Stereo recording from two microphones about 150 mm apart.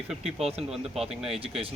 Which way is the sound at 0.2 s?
45° right (ahead or behind).